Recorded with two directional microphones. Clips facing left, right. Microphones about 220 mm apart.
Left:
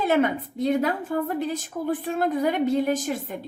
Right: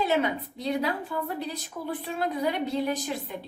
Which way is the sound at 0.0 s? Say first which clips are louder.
Left 4 dB; 50° left (ahead or behind).